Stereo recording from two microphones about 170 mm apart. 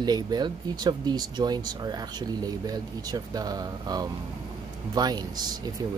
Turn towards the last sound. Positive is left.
turn(degrees=-25)  # may be behind; listen again after turning